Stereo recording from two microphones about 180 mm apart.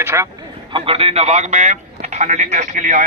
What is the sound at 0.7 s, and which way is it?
A man's voice, 30° right (ahead or behind).